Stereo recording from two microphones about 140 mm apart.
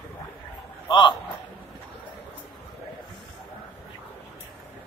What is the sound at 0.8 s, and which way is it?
Speech, 35° left (ahead or behind).